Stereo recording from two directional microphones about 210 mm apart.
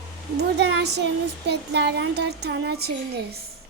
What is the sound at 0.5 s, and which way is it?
Speech, 55° right (ahead or behind).